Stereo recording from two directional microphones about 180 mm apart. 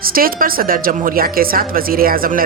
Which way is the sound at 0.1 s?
55° right (ahead or behind).